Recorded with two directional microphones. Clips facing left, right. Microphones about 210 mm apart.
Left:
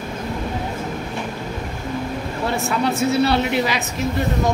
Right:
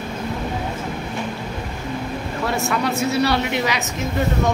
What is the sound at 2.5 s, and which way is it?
Speech, 30° left (ahead or behind).